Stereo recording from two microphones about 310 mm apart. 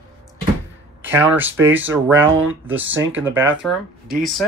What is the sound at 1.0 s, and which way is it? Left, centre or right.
Speech, centre.